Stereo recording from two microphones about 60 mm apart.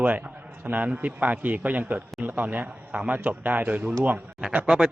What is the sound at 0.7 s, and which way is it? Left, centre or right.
A man's voice, right.